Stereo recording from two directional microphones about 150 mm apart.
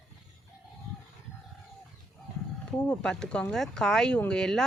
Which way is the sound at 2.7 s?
5° left (ahead or behind).